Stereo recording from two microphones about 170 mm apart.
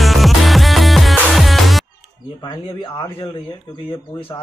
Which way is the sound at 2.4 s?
25° left (ahead or behind).